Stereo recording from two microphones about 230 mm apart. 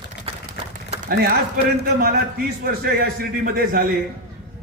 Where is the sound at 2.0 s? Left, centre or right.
Right.